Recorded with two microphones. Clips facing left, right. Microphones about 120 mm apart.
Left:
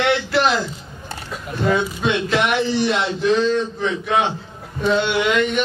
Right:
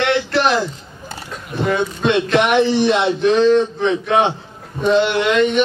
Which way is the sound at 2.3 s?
20° right (ahead or behind).